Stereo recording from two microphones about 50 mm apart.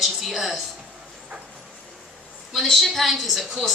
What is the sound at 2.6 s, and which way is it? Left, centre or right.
A woman's voice, centre.